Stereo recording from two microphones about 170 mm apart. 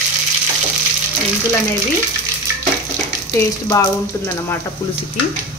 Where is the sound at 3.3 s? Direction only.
20° left (ahead or behind).